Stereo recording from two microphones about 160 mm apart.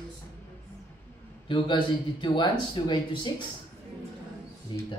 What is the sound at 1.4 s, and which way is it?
A man's voice, 30° left (ahead or behind).